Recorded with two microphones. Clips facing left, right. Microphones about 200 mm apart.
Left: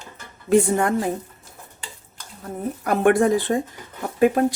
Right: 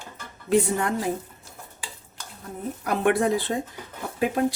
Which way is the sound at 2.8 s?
50° left (ahead or behind).